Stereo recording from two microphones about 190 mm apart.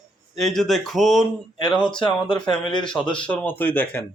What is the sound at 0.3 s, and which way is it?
Speech, centre (ahead or behind).